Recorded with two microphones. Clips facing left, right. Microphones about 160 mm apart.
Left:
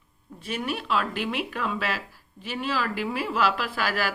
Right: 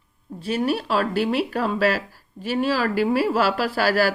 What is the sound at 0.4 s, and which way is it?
Speech, 35° right (ahead or behind).